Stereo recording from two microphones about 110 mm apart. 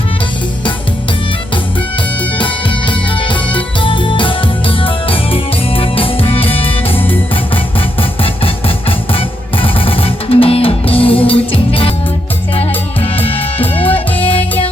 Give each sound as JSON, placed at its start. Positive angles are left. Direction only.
{"t": 3.2, "sound": "music", "side_deg": 50}
{"t": 9.1, "sound": "music", "side_deg": 55}
{"t": 14.2, "sound": "music", "side_deg": 55}